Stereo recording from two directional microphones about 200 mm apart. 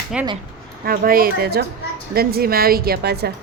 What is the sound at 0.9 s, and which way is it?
Speech, 45° right (ahead or behind).